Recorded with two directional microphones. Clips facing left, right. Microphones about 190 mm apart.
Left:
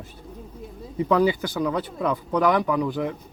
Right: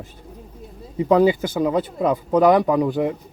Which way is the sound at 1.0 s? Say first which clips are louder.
Right 4 dB; 20° right (ahead or behind).